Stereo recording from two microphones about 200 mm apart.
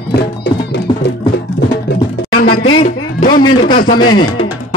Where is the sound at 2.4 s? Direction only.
45° left (ahead or behind).